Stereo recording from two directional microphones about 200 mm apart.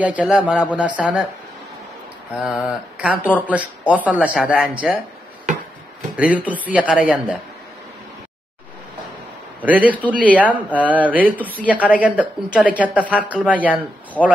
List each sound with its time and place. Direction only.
0.0 s a woman's voice: 5° right (ahead or behind)
2.3 s a woman's voice: 5° right (ahead or behind)
6.1 s a woman's voice: 5° right (ahead or behind)
9.6 s a man's voice: 5° right (ahead or behind)